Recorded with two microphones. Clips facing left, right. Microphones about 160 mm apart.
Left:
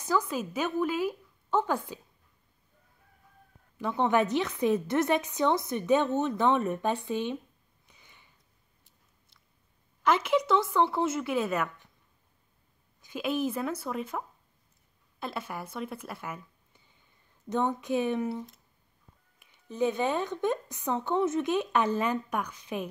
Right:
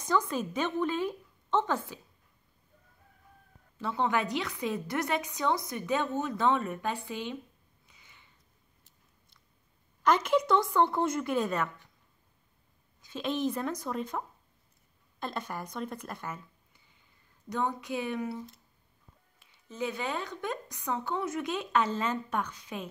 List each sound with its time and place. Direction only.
0.0 s a woman's voice: 10° left (ahead or behind)
3.7 s a woman's voice: 15° left (ahead or behind)
7.9 s a sound: 15° left (ahead or behind)
10.0 s a woman's voice: centre (ahead or behind)
13.0 s a woman's voice: 10° left (ahead or behind)
17.5 s a woman's voice: 20° left (ahead or behind)
19.4 s a woman's voice: 15° left (ahead or behind)